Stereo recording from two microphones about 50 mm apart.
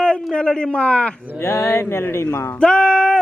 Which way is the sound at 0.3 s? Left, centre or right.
Centre.